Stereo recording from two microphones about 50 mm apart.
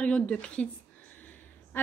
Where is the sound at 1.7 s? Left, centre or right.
Left.